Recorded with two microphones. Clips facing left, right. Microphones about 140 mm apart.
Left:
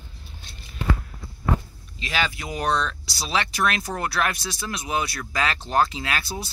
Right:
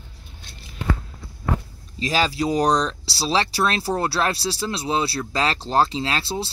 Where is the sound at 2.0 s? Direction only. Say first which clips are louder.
Right 6 dB; 35° right (ahead or behind).